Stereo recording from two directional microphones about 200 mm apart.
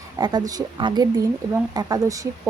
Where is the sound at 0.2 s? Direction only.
20° right (ahead or behind).